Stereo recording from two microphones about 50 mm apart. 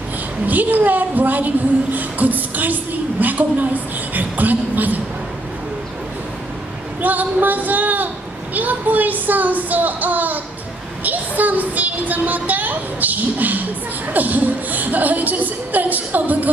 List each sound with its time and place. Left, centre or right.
0.5 s a woman's voice: right
7.0 s a woman's voice: right